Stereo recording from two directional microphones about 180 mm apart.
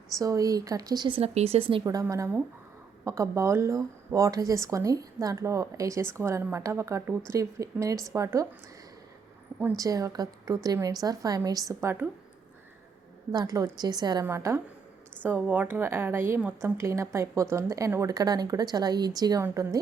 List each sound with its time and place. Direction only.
0.2 s a woman's voice: 20° right (ahead or behind)
9.6 s a woman's voice: 15° right (ahead or behind)
13.3 s a woman's voice: 20° right (ahead or behind)